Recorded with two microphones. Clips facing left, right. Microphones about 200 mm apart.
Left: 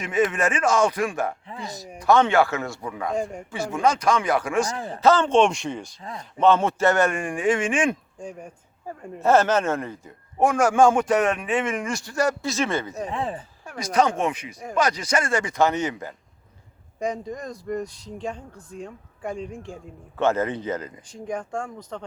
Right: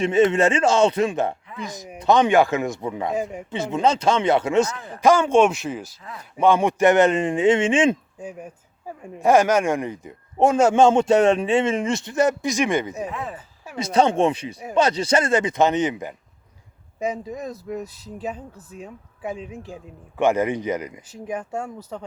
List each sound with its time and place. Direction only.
0.0 s speech: 25° right (ahead or behind)
3.1 s speech: 5° right (ahead or behind)
3.5 s speech: 20° right (ahead or behind)
4.9 s speech: 10° right (ahead or behind)
6.0 s speech: 30° left (ahead or behind)
6.3 s speech: 10° right (ahead or behind)
8.2 s speech: 5° right (ahead or behind)
13.1 s speech: 30° left (ahead or behind)
13.7 s speech: 25° right (ahead or behind)
17.0 s speech: 5° right (ahead or behind)
20.1 s speech: 15° right (ahead or behind)